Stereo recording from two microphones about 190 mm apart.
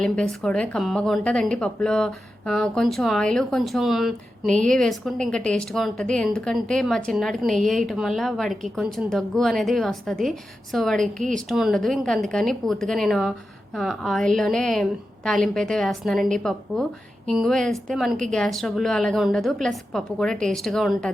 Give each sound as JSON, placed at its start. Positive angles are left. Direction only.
{"t": 0.0, "sound": "a woman's voice", "side_deg": 5}